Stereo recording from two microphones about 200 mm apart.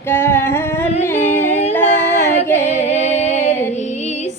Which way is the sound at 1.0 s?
10° left (ahead or behind).